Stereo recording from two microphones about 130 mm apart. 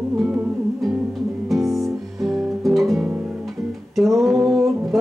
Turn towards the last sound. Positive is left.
turn(degrees=0)  # may be behind; listen again after turning